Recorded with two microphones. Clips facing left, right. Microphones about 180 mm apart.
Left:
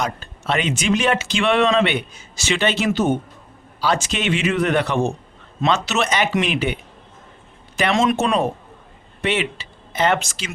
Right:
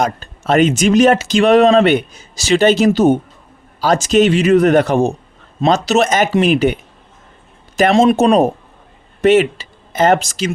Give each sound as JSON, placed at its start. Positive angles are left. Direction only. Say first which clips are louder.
{"t": 0.0, "sound": "speech", "louder": "right 7 dB", "side_deg": -45}
{"t": 7.8, "sound": "speech", "louder": "right 7 dB", "side_deg": -40}